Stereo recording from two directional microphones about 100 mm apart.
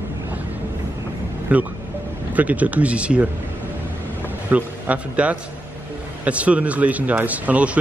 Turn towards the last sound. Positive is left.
turn(degrees=-15)  # may be behind; listen again after turning